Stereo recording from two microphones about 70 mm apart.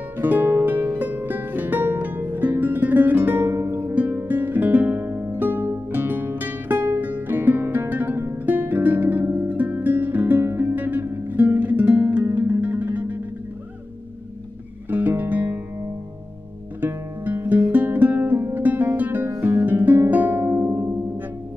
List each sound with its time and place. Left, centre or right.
0.2 s music: right
14.9 s music: right
16.8 s music: right